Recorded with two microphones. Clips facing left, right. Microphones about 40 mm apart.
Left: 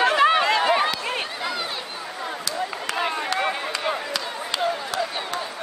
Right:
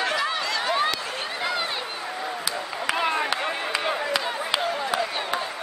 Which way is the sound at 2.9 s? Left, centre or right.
Centre.